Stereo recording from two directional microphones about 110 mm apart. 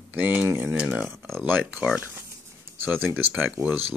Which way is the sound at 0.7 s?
10° right (ahead or behind).